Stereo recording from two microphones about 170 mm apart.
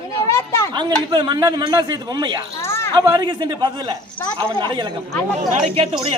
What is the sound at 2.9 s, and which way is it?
Speech, 20° right (ahead or behind).